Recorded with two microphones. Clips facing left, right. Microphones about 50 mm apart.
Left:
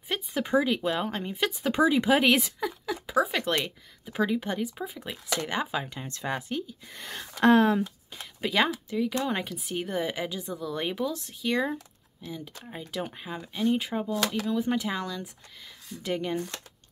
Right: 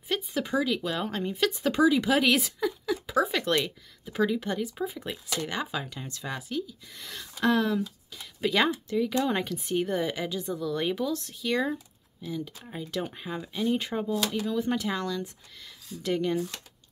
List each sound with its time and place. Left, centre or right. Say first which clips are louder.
0.1 s speech: left 2 dB; centre
1.7 s speech: left 1 dB; left
2.6 s speech: right 3 dB; centre
5.5 s speech: left 2 dB; centre
6.0 s speech: left 4 dB; left
8.4 s speech: right 1 dB; centre